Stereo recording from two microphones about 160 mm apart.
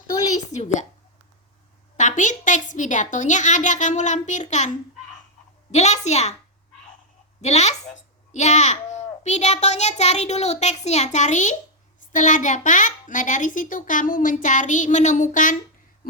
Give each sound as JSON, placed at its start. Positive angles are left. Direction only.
{"t": 0.3, "sound": "a child's voice", "side_deg": 50}
{"t": 2.0, "sound": "a child's voice", "side_deg": 50}
{"t": 5.7, "sound": "a child's voice", "side_deg": 45}
{"t": 7.4, "sound": "a child's voice", "side_deg": 45}